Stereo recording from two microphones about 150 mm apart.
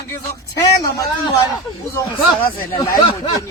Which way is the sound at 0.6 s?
25° left (ahead or behind).